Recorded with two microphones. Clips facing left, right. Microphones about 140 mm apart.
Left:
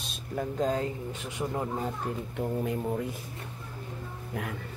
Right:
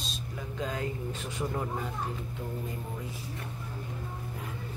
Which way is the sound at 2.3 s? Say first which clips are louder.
Left 7 dB; 70° left (ahead or behind).